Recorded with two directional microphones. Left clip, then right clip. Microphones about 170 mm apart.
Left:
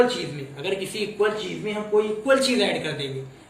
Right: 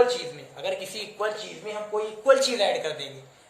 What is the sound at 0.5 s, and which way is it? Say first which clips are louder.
A man's voice: left 2 dB; 35° right (ahead or behind).